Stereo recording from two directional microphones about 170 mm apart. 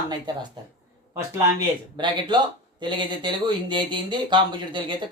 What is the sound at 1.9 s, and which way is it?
Speech, 25° right (ahead or behind).